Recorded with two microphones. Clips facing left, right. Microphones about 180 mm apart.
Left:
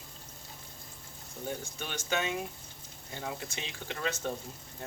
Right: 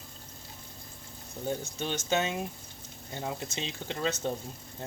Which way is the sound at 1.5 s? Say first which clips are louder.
Right 6 dB; 25° right (ahead or behind).